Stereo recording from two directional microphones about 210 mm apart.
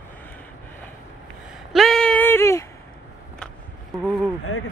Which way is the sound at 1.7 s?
Centre (ahead or behind).